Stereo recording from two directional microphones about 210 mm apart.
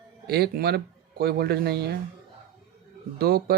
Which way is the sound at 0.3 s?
50° right (ahead or behind).